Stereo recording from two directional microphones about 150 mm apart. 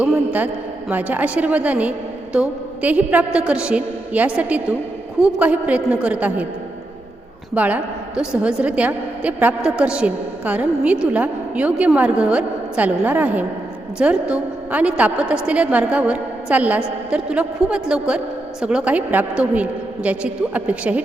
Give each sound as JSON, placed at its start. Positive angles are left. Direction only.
{"t": 0.0, "sound": "a woman's voice", "side_deg": -10}
{"t": 7.5, "sound": "a woman's voice", "side_deg": -10}